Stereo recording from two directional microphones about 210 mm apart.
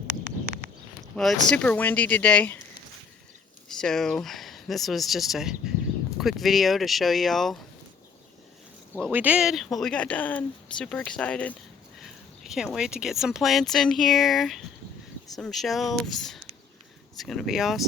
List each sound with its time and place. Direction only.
0.1 s a sound: 35° right (ahead or behind)
1.1 s speech: centre (ahead or behind)
3.7 s speech: centre (ahead or behind)
9.1 s speech: 5° right (ahead or behind)